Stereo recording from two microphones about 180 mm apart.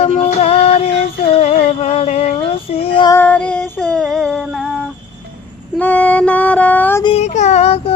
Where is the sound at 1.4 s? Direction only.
35° left (ahead or behind).